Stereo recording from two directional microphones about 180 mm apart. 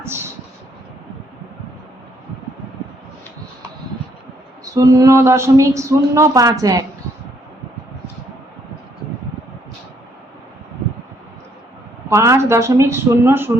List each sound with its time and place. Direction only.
4.6 s speech: 20° right (ahead or behind)
12.1 s speech: 15° right (ahead or behind)